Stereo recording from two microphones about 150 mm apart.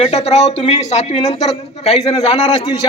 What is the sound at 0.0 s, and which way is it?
Speech, 45° left (ahead or behind).